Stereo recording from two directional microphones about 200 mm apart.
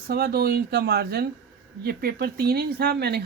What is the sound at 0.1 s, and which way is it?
Speech, 50° right (ahead or behind).